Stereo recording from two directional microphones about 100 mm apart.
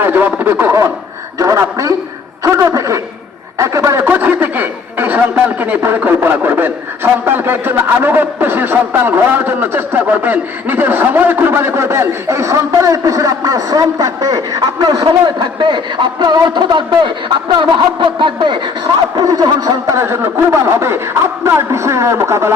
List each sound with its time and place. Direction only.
0.0 s speech: 20° right (ahead or behind)
1.4 s speech: 35° right (ahead or behind)
4.0 s a man's voice: 20° right (ahead or behind); by 18.6 s 50° right (ahead or behind)
19.2 s speech: 40° right (ahead or behind)
20.0 s a man's voice: 25° right (ahead or behind)